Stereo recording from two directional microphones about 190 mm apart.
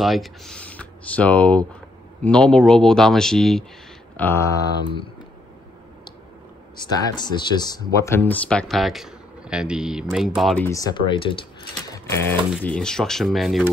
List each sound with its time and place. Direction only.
0.0 s speech: centre (ahead or behind)
4.2 s speech: 15° left (ahead or behind)
7.2 s speech: 20° left (ahead or behind); by 10.6 s centre (ahead or behind)
10.6 s speech: 15° left (ahead or behind)
11.9 s sewing machine: 15° left (ahead or behind)
12.6 s speech: 5° left (ahead or behind)